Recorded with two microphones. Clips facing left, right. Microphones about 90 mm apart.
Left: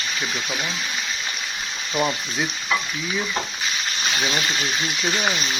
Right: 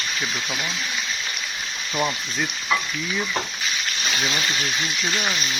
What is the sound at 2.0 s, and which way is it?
Speech, 5° left (ahead or behind).